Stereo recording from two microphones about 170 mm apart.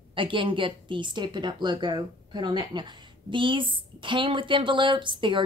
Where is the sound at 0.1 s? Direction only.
30° right (ahead or behind).